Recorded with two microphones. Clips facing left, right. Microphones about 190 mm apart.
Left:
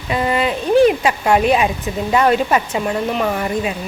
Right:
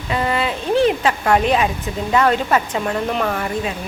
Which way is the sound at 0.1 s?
15° left (ahead or behind).